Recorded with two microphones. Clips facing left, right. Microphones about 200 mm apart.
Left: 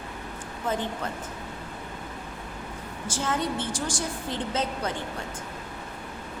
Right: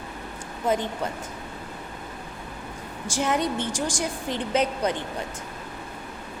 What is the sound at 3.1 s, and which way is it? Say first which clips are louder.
A woman's voice: right 4 dB; 15° right (ahead or behind).